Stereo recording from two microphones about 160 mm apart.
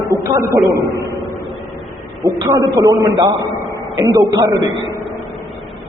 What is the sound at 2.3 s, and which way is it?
A man's voice, 25° right (ahead or behind).